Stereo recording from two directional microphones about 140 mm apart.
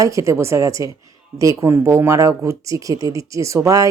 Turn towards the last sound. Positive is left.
turn(degrees=-25)  # may be behind; listen again after turning